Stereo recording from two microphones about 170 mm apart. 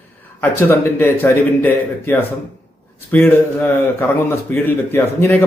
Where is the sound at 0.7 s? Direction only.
15° left (ahead or behind).